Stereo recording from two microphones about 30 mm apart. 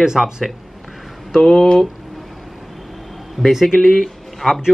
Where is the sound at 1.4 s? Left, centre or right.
Left.